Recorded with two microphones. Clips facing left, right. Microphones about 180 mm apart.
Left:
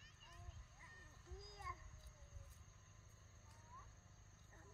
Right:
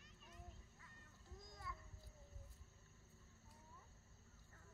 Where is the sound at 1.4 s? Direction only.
20° left (ahead or behind).